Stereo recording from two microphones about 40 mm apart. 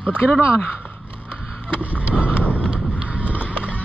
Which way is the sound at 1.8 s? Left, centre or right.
Right.